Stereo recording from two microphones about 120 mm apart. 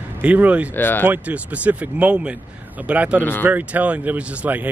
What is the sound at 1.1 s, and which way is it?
Speech, 10° right (ahead or behind).